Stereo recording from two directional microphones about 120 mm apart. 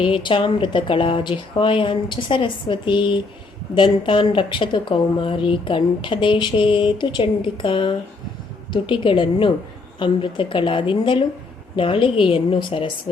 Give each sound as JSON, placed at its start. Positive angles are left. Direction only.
{"t": 0.0, "sound": "speech", "side_deg": 45}